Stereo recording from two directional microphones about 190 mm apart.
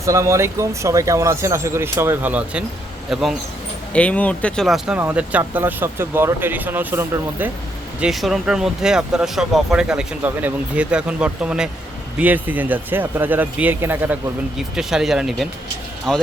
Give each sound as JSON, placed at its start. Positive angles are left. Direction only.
{"t": 0.0, "sound": "speech", "side_deg": -15}